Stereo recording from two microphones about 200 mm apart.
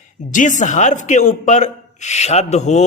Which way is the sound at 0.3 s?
40° left (ahead or behind).